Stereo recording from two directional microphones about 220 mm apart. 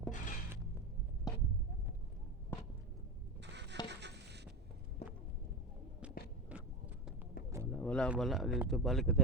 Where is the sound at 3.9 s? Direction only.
50° right (ahead or behind).